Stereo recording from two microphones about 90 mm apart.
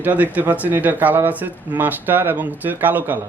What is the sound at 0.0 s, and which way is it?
Speech, 15° right (ahead or behind).